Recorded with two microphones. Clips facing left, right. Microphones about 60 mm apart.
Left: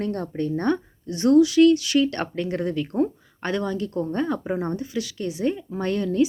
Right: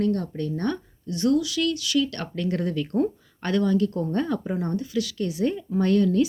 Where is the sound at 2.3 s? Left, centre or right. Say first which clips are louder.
Left 1 dB; centre.